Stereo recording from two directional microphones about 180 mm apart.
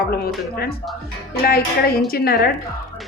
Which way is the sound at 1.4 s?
60° left (ahead or behind).